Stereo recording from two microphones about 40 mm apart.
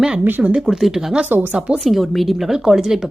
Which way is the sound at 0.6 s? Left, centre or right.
Centre.